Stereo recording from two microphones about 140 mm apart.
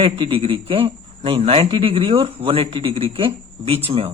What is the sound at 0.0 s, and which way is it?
Speech, 40° right (ahead or behind).